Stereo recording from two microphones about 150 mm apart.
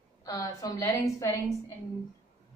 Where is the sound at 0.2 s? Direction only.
20° left (ahead or behind).